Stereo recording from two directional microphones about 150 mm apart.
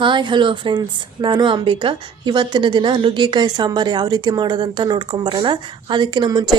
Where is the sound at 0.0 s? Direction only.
30° right (ahead or behind).